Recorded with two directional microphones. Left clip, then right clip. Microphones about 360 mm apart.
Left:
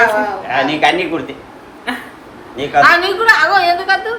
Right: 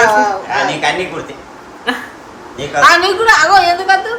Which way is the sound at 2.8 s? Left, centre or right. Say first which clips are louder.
Right 2 dB; centre.